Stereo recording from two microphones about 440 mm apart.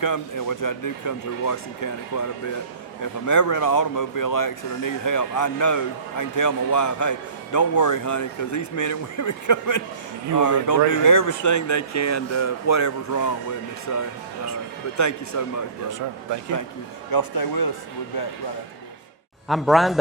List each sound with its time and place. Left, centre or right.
0.0 s speech: left
15.9 s speech: right
17.1 s speech: left
19.5 s speech: centre